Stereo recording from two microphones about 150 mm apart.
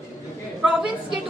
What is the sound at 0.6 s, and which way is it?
Speech, 5° right (ahead or behind).